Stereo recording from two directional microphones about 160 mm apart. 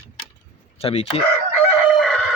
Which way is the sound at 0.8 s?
40° left (ahead or behind).